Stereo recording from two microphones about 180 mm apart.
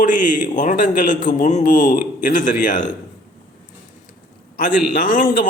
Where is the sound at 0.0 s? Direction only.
45° left (ahead or behind).